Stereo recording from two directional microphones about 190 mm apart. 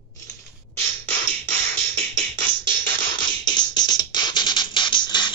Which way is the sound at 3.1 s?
25° left (ahead or behind).